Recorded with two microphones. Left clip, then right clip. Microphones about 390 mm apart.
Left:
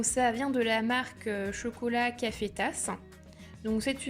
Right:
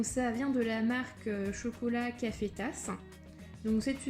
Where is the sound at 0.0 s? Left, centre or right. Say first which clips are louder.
Left 6 dB; centre.